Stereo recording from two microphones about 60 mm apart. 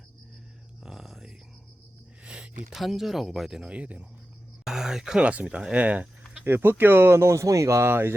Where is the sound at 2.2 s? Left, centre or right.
Centre.